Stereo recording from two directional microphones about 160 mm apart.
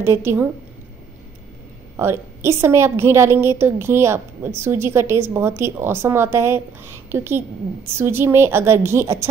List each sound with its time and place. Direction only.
0.0 s a woman's voice: 15° right (ahead or behind)
2.0 s a woman's voice: 15° right (ahead or behind)